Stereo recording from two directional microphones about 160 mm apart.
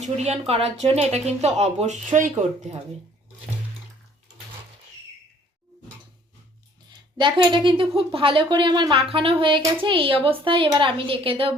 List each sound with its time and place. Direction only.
0.0 s speech: 40° right (ahead or behind)
6.9 s a woman's voice: 30° right (ahead or behind)